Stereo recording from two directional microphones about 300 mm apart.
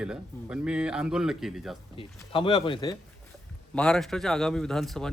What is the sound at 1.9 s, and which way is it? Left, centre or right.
Speech, centre.